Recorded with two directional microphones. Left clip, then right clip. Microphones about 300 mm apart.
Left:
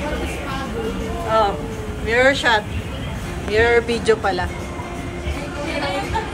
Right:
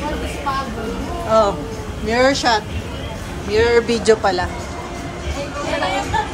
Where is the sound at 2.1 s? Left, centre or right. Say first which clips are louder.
Even; centre.